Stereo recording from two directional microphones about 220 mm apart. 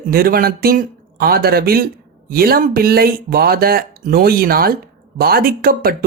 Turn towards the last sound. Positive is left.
turn(degrees=-40)  # may be behind; listen again after turning